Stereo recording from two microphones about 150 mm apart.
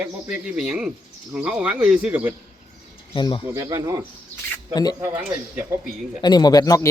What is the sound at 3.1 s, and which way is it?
Speech, 30° left (ahead or behind).